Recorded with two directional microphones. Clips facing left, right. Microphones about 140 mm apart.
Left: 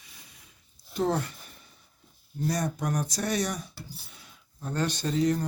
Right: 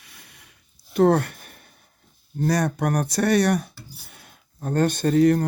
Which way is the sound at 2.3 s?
70° right (ahead or behind).